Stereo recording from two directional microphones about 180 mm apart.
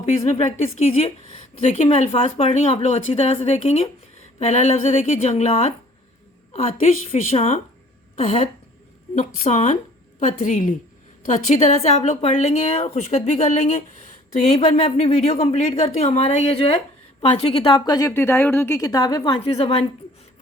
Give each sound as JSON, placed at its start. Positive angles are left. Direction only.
{"t": 0.2, "sound": "speech", "side_deg": 40}
{"t": 7.1, "sound": "a woman's voice", "side_deg": 35}